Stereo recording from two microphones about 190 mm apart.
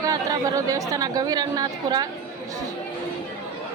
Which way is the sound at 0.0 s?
20° right (ahead or behind).